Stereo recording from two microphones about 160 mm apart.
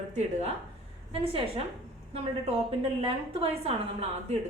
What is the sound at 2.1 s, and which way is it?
A woman's voice, 35° right (ahead or behind).